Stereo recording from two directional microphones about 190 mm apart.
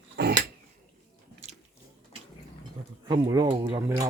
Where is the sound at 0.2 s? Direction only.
60° right (ahead or behind).